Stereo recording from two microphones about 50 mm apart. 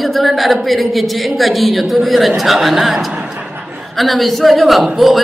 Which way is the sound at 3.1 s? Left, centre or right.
Right.